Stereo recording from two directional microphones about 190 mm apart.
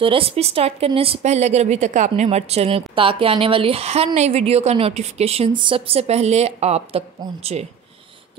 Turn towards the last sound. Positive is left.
turn(degrees=-30)  # may be behind; listen again after turning